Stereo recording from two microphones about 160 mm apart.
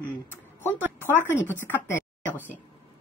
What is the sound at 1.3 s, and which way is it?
Speech, 15° left (ahead or behind).